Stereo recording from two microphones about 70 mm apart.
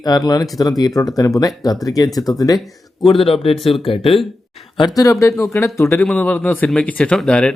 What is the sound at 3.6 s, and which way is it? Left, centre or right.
Speech, centre.